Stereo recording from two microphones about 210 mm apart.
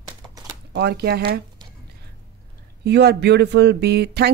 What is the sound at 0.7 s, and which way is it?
Speech, 50° right (ahead or behind).